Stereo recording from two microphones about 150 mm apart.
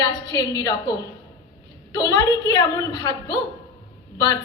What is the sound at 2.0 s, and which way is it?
A woman's voice, 25° left (ahead or behind).